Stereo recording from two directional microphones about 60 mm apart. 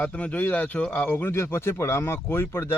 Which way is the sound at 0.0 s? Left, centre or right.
Left.